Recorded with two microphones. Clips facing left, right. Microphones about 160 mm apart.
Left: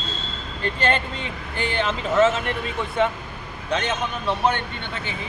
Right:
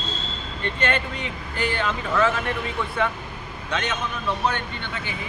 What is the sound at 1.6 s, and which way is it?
Speech, 25° left (ahead or behind).